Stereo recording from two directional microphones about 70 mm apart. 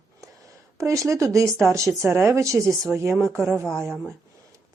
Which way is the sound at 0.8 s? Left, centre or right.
Right.